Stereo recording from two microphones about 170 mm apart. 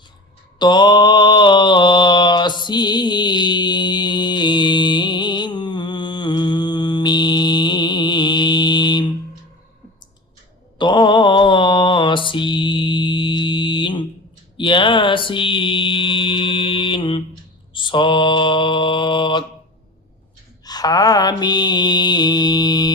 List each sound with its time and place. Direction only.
0.6 s mantra: 25° left (ahead or behind)
10.8 s mantra: 25° left (ahead or behind)
20.7 s mantra: 25° left (ahead or behind)